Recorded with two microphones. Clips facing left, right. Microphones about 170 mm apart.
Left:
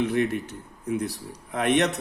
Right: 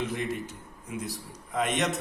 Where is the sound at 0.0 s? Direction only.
60° left (ahead or behind).